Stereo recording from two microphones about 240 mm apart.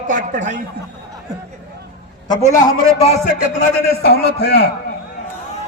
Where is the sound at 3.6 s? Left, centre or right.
Left.